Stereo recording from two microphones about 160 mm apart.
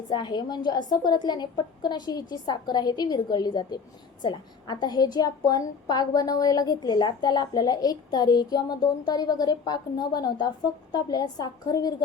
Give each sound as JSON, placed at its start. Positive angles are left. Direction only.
{"t": 0.1, "sound": "a woman's voice", "side_deg": 30}